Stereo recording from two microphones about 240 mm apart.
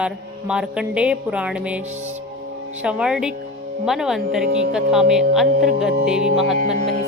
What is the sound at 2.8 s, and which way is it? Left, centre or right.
Speech, centre.